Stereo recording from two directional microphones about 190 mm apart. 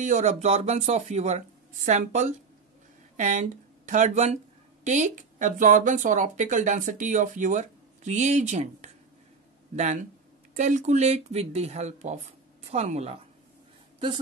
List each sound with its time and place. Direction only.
0.0 s speech: 40° right (ahead or behind)